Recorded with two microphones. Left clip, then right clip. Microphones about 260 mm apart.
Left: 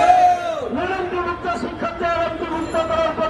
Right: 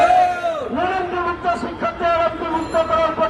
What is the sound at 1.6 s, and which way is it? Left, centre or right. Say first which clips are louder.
Music: right 2 dB; centre.